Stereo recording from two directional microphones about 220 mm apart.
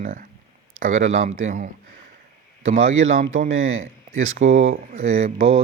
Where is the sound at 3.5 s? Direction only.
65° right (ahead or behind).